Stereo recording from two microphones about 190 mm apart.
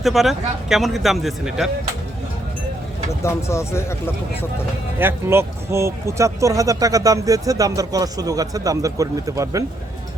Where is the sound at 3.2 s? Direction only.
15° left (ahead or behind).